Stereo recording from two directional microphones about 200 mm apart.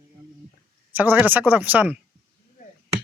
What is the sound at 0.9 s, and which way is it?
Speech, 10° right (ahead or behind).